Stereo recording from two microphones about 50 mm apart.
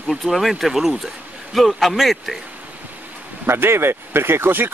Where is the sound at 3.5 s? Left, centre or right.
Right.